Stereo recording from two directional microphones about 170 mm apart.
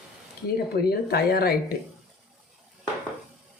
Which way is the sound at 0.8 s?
65° left (ahead or behind).